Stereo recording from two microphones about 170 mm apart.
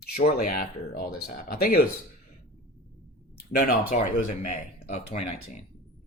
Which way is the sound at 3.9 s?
40° left (ahead or behind).